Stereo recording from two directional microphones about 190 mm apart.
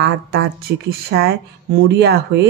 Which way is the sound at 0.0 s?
55° right (ahead or behind).